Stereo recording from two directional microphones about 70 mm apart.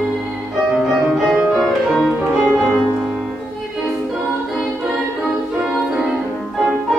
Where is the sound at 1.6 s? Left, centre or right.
Centre.